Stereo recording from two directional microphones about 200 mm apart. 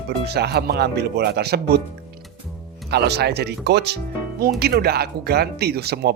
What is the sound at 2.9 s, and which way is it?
Speech, 55° right (ahead or behind).